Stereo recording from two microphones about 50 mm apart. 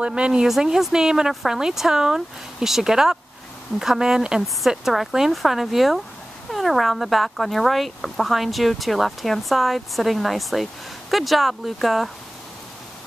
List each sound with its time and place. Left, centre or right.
0.0 s speech: right
0.5 s speech: centre